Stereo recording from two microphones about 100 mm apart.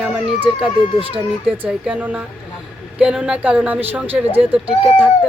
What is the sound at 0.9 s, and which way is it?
Speech, 65° right (ahead or behind).